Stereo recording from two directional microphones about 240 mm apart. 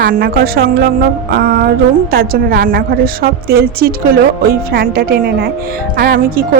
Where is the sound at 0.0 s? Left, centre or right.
Right.